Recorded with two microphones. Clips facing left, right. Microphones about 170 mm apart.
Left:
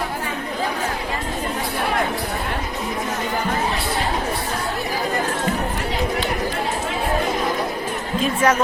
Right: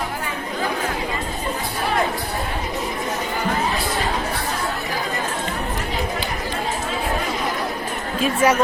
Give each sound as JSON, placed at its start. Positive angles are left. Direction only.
{"t": 8.2, "sound": "music", "side_deg": -10}